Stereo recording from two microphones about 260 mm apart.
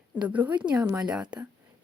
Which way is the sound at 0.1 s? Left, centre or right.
Centre.